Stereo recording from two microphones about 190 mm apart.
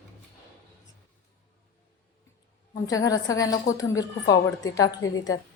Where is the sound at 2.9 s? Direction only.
20° left (ahead or behind).